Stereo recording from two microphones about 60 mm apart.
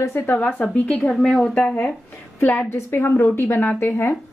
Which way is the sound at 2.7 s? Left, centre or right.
Left.